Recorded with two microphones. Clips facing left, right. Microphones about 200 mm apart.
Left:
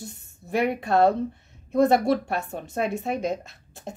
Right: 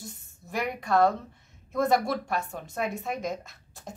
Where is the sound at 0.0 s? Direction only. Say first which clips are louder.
Left 4 dB; 65° left (ahead or behind).